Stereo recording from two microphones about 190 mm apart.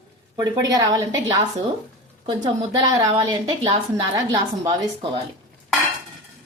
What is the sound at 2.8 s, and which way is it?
A woman's voice, 20° right (ahead or behind).